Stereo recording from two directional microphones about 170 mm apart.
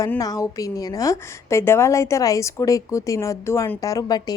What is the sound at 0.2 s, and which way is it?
Speech, 20° left (ahead or behind).